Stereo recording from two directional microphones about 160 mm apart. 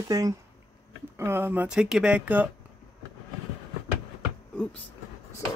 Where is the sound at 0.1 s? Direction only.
20° right (ahead or behind).